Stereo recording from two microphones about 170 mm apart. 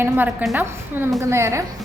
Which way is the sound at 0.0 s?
10° right (ahead or behind).